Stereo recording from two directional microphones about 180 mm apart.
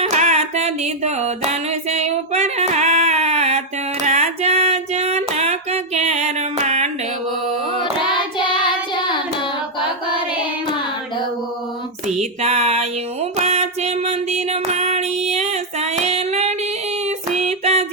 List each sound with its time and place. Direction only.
0.0 s music: 40° right (ahead or behind)
4.0 s a sound: 40° right (ahead or behind)
8.4 s child singing: 25° left (ahead or behind)
12.0 s a sound: 40° right (ahead or behind)
13.3 s child singing: 35° right (ahead or behind)
15.3 s female singing: 35° right (ahead or behind)